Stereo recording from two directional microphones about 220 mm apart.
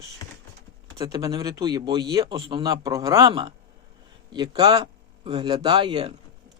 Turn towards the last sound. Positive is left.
turn(degrees=-25)  # may be behind; listen again after turning